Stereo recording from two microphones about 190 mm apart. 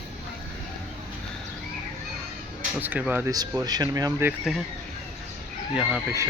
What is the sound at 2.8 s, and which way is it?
Speech, 10° right (ahead or behind).